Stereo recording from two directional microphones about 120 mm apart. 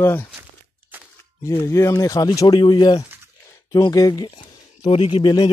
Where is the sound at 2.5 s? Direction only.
40° left (ahead or behind).